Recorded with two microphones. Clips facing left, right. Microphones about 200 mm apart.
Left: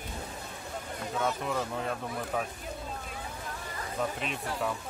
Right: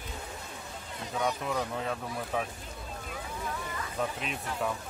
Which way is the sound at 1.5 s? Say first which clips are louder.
Even; centre (ahead or behind).